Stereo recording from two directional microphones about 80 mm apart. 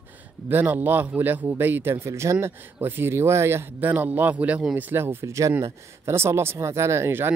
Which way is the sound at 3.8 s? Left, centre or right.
Right.